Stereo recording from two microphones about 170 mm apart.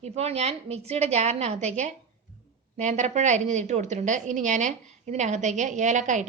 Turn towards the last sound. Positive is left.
turn(degrees=-45)  # may be behind; listen again after turning